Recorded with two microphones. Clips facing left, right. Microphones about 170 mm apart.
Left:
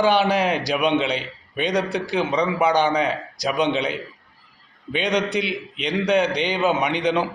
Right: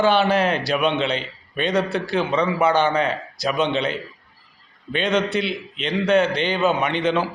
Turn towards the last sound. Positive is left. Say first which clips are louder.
# even
turn(degrees=15)  # may be behind; listen again after turning